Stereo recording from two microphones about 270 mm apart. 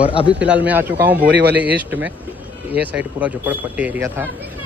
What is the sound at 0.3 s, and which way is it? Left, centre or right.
Speech, centre.